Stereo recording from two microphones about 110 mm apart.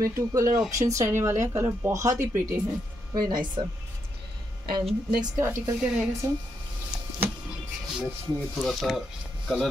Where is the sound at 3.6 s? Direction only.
45° right (ahead or behind).